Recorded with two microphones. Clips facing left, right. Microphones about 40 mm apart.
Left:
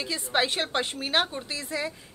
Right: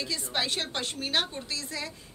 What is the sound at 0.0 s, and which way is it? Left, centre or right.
A woman's voice, left.